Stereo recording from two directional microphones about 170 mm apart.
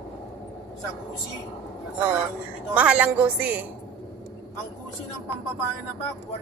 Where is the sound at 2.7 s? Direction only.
10° right (ahead or behind).